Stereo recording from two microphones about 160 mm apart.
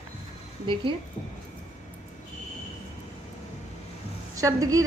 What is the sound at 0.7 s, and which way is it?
Speech, 30° right (ahead or behind).